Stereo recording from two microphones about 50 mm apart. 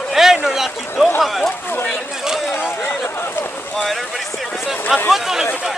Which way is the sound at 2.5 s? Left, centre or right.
Left.